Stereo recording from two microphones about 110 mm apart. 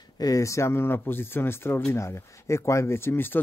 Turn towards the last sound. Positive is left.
turn(degrees=20)  # may be behind; listen again after turning